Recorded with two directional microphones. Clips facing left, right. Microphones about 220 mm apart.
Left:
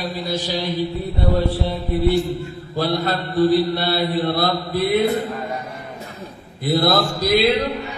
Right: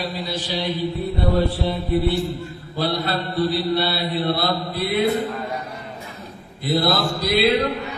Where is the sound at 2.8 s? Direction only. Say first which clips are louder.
Left 1 dB; 45° left (ahead or behind).